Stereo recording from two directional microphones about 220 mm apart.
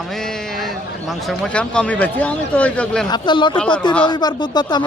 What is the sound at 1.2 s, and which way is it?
Speech, 5° left (ahead or behind).